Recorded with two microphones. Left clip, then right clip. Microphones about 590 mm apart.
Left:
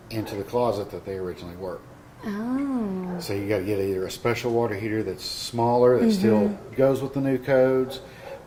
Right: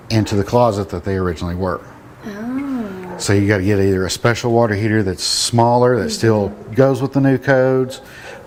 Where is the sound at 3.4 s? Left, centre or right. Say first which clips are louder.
Right 6 dB; right.